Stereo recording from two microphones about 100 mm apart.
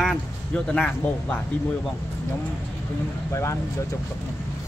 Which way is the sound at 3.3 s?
30° left (ahead or behind).